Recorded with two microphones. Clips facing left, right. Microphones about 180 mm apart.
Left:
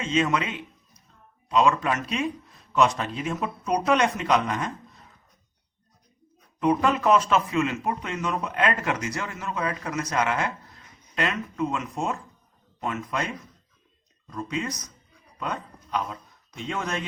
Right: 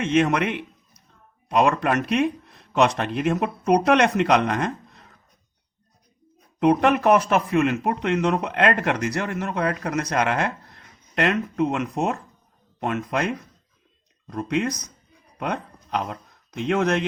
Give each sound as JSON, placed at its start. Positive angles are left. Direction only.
{"t": 0.0, "sound": "speech", "side_deg": -65}
{"t": 6.6, "sound": "speech", "side_deg": -70}